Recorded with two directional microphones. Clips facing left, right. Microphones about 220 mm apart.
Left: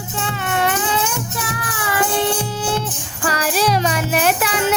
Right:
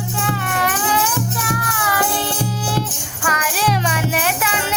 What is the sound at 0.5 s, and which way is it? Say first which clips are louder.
Mosquito: left 5 dB; 25° left (ahead or behind).